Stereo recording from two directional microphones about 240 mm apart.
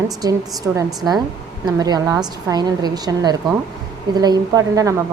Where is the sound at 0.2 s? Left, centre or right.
Centre.